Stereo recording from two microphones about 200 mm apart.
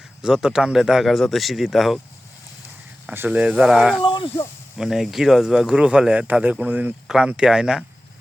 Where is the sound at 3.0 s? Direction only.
10° right (ahead or behind).